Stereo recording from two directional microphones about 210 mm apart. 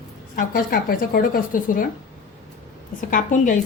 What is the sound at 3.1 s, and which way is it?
Speech, 40° left (ahead or behind).